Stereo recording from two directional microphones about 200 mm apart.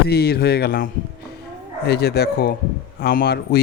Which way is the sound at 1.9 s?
55° left (ahead or behind).